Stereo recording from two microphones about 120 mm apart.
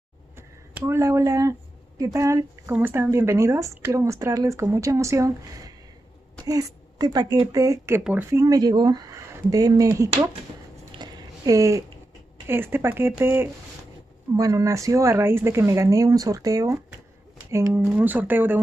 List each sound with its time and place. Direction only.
0.4 s a woman's voice: 20° right (ahead or behind)
8.0 s speech: 15° right (ahead or behind)
8.3 s a woman's voice: 30° right (ahead or behind)
11.0 s a sound: 35° right (ahead or behind)
12.4 s a woman's voice: 20° right (ahead or behind)
17.7 s speech: 15° right (ahead or behind)